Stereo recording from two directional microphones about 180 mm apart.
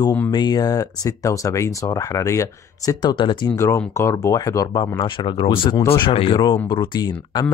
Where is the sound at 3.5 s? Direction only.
15° left (ahead or behind).